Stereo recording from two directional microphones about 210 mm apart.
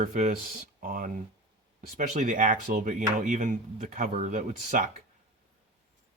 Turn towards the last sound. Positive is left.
turn(degrees=-35)  # may be behind; listen again after turning